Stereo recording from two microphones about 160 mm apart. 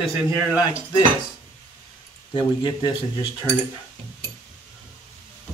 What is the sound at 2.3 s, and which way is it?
Speech, 30° left (ahead or behind).